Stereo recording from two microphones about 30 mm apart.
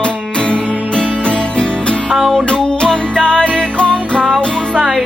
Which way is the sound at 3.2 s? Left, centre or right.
Left.